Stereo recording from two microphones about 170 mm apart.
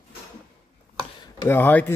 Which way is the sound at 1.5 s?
10° left (ahead or behind).